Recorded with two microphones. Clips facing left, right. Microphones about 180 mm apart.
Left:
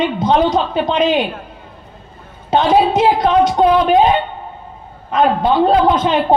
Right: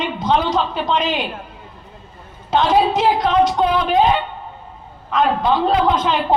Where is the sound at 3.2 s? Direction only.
50° left (ahead or behind).